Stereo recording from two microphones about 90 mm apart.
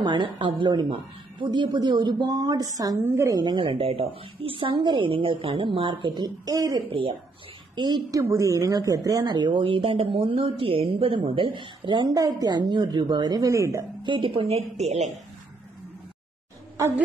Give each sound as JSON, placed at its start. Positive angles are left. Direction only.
{"t": 0.0, "sound": "a woman's voice", "side_deg": -60}
{"t": 3.5, "sound": "a woman's voice", "side_deg": -70}
{"t": 6.9, "sound": "speech", "side_deg": -90}
{"t": 7.7, "sound": "a woman's voice", "side_deg": -55}
{"t": 8.2, "sound": "speech", "side_deg": -35}
{"t": 12.1, "sound": "a woman's voice", "side_deg": -40}
{"t": 13.5, "sound": "a woman's voice", "side_deg": -35}
{"t": 14.0, "sound": "a woman's voice", "side_deg": -70}